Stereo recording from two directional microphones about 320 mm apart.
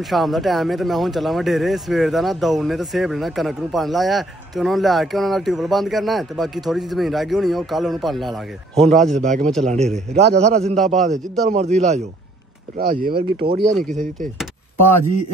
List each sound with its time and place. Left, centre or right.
0.0 s speech: centre
9.1 s a man's voice: right
10.1 s a man's voice: right
13.6 s speech: centre